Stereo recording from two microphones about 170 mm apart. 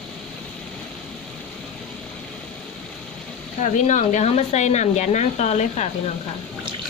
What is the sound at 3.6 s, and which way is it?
Speech, 45° left (ahead or behind).